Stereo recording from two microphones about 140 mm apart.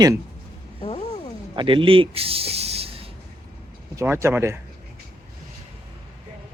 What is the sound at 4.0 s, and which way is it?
Speech, 20° right (ahead or behind).